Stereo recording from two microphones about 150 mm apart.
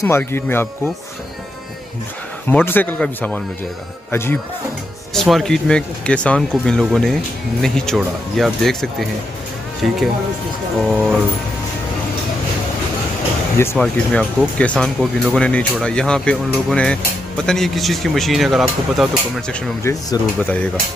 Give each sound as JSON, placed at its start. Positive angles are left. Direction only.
{"t": 0.0, "sound": "speech", "side_deg": 15}
{"t": 2.5, "sound": "speech", "side_deg": 10}
{"t": 5.1, "sound": "speech", "side_deg": 0}
{"t": 10.8, "sound": "speech", "side_deg": 0}
{"t": 13.7, "sound": "speech", "side_deg": 5}
{"t": 19.8, "sound": "speech", "side_deg": 20}